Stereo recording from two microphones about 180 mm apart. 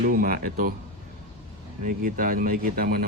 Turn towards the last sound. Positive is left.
turn(degrees=-55)  # may be behind; listen again after turning